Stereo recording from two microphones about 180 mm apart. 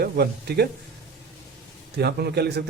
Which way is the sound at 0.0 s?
65° right (ahead or behind).